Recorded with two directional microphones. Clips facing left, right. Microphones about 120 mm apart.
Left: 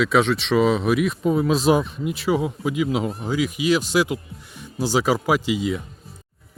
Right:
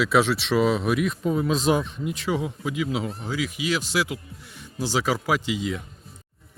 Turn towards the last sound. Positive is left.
turn(degrees=15)  # may be behind; listen again after turning